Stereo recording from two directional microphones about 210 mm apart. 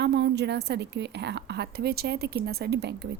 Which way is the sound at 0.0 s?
55° right (ahead or behind).